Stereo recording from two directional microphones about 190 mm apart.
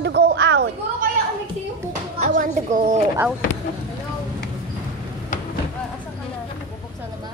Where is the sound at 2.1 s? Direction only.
40° right (ahead or behind).